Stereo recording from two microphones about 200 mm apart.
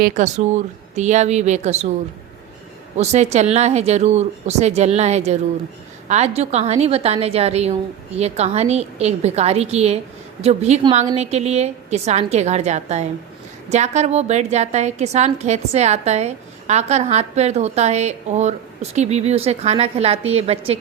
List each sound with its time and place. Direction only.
0.0 s a woman's voice: 35° right (ahead or behind)
3.0 s a woman's voice: 35° right (ahead or behind)